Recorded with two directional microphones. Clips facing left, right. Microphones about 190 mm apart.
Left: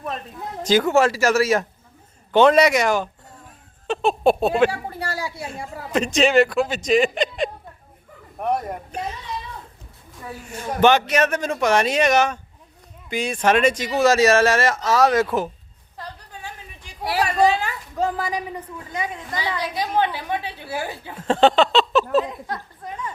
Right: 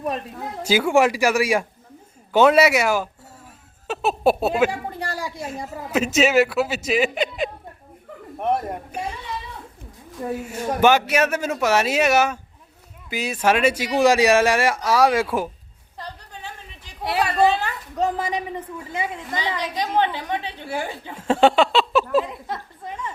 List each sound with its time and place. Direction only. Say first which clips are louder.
0.6 s a man's voice: left 1 dB; 10° right (ahead or behind)
4.7 s speech: even; 15° right (ahead or behind)
5.5 s a man's voice: right 1 dB; 5° right (ahead or behind)
10.4 s speech: left 1 dB; 10° right (ahead or behind)
16.0 s a sound: even; 5° left (ahead or behind)
17.9 s a man's voice: right 1 dB; centre (ahead or behind)
19.6 s a woman's voice: even; 10° left (ahead or behind)
21.2 s speech: even; 10° right (ahead or behind)